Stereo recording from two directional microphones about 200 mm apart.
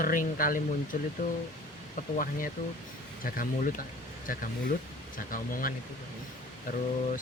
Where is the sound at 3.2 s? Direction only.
45° left (ahead or behind).